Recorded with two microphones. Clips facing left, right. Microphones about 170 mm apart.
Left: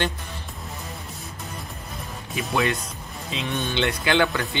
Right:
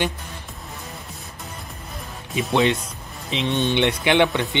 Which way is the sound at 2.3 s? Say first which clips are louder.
Right 5 dB; 25° right (ahead or behind).